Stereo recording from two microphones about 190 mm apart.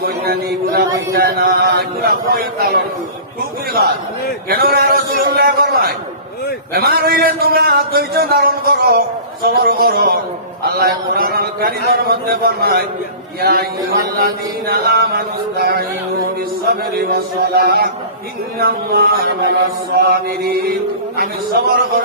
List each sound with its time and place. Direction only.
0.0 s a man's voice: 55° right (ahead or behind)
4.4 s a man's voice: 50° right (ahead or behind)